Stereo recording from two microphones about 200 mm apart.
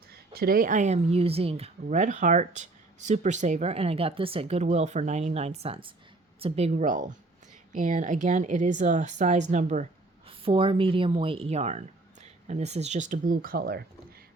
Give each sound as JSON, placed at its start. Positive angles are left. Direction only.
{"t": 0.1, "sound": "speech", "side_deg": -50}
{"t": 10.2, "sound": "speech", "side_deg": -25}